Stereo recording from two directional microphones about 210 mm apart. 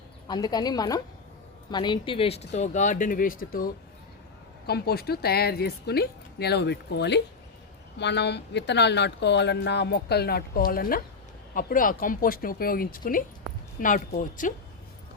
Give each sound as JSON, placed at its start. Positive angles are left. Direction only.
{"t": 0.3, "sound": "a woman's voice", "side_deg": 20}